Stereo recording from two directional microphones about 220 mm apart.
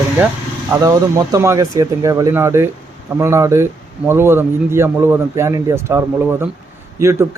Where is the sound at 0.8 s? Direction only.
15° right (ahead or behind).